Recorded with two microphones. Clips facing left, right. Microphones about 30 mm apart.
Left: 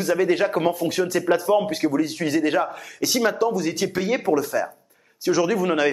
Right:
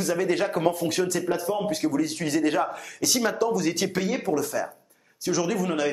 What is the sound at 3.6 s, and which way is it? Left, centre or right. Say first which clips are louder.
Speech: left 2 dB; centre.